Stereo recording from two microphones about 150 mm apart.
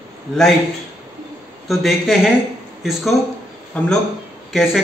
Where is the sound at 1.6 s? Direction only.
Centre (ahead or behind).